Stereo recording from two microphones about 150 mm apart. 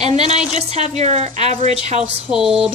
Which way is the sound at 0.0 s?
45° right (ahead or behind).